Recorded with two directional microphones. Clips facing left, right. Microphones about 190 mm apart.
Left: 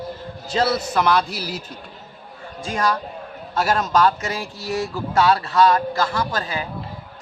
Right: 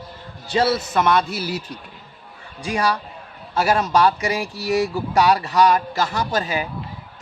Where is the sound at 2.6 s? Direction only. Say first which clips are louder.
Right 1 dB; 10° right (ahead or behind).